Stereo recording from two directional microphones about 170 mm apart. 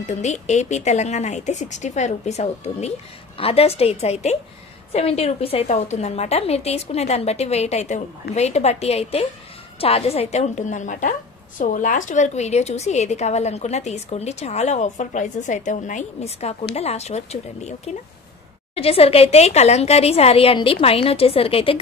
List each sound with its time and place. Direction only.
0.0 s a woman's voice: 45° left (ahead or behind)